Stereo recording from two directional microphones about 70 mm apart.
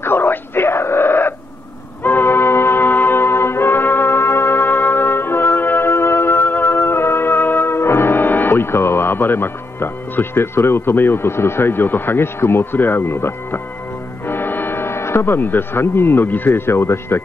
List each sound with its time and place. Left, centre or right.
0.0 s wail: left
2.0 s music: left
14.2 s foghorn: left